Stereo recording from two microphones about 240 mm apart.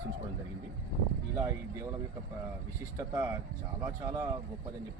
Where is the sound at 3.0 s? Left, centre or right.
Centre.